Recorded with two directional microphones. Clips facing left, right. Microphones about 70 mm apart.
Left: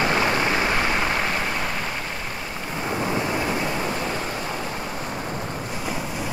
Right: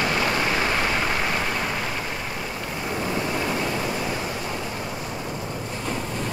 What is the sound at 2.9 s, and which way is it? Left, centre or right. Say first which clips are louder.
Vehicle: left 2 dB; centre.